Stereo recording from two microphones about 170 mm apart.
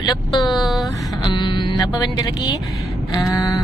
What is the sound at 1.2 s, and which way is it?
Speech, 25° left (ahead or behind).